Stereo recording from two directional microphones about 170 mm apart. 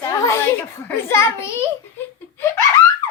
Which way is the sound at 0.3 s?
15° left (ahead or behind).